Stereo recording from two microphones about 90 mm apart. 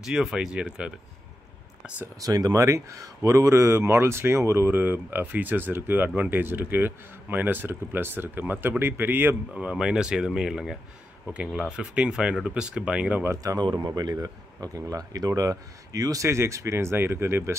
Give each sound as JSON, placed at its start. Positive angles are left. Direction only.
{"t": 0.0, "sound": "speech", "side_deg": -5}
{"t": 2.2, "sound": "speech", "side_deg": -40}
{"t": 9.6, "sound": "speech", "side_deg": -10}
{"t": 13.6, "sound": "speech", "side_deg": -50}